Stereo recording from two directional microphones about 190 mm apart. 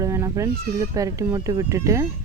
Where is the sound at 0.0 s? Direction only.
15° right (ahead or behind).